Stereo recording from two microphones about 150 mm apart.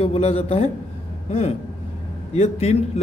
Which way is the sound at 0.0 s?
40° left (ahead or behind).